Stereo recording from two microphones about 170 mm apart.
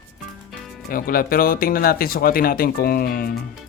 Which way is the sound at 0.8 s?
60° left (ahead or behind).